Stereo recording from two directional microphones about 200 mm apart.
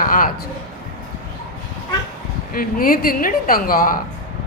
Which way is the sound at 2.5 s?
45° left (ahead or behind).